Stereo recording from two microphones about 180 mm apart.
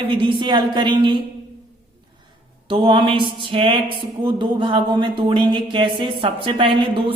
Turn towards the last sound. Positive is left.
turn(degrees=-30)  # may be behind; listen again after turning